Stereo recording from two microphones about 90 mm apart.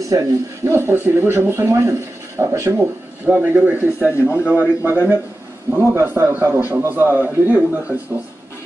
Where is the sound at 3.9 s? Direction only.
25° left (ahead or behind).